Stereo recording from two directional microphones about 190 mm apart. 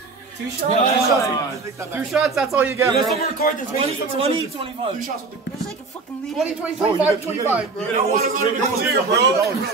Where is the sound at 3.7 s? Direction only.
30° right (ahead or behind).